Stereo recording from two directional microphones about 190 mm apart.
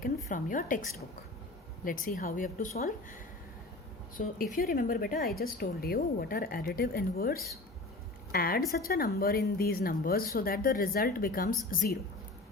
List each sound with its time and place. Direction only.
0.0 s a woman's voice: 45° left (ahead or behind)
1.8 s speech: 45° left (ahead or behind)
4.2 s speech: 45° left (ahead or behind)